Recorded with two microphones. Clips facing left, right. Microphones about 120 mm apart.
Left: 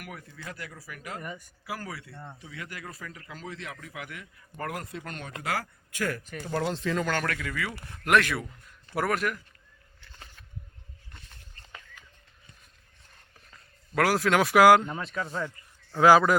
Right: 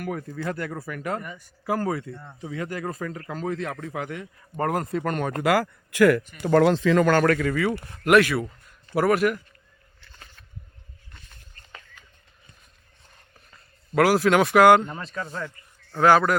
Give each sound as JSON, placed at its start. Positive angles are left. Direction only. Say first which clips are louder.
{"t": 0.0, "sound": "speech", "louder": "right 12 dB", "side_deg": -45}
{"t": 3.8, "sound": "speech", "louder": "right 10 dB", "side_deg": -35}
{"t": 7.1, "sound": "speech", "louder": "right 11 dB", "side_deg": -45}
{"t": 7.6, "sound": "speech", "louder": "right 10 dB", "side_deg": -25}
{"t": 8.0, "sound": "a man's voice", "louder": "right 6 dB", "side_deg": -5}
{"t": 10.0, "sound": "a sound", "louder": "even", "side_deg": 10}
{"t": 13.5, "sound": "a man's voice", "louder": "right 6 dB", "side_deg": -5}